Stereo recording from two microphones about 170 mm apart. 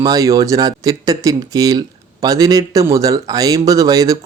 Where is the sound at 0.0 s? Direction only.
20° right (ahead or behind).